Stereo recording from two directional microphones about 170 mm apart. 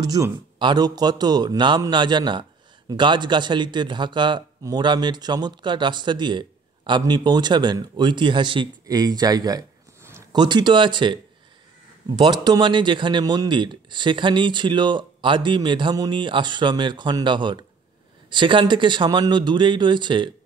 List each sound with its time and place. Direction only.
0.0 s speech: 20° right (ahead or behind)
12.2 s speech: 25° right (ahead or behind)